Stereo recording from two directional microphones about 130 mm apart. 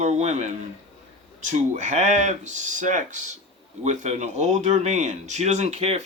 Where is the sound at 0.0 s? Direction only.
60° right (ahead or behind).